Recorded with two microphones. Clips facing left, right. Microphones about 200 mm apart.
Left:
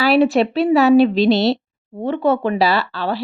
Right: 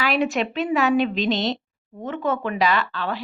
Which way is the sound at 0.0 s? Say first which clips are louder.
Left 8 dB; 35° left (ahead or behind).